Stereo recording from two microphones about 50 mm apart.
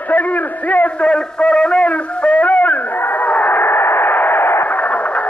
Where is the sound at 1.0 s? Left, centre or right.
Centre; by 4.6 s left.